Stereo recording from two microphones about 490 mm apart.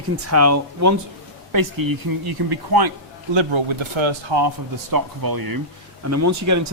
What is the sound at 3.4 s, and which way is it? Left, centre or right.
Speech, right.